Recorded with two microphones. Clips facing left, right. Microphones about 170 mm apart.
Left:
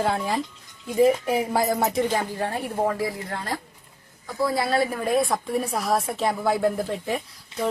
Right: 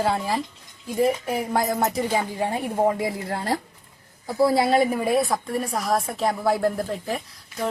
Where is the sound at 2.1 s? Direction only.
15° right (ahead or behind).